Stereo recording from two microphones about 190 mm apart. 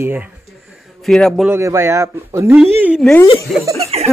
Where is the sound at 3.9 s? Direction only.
30° right (ahead or behind).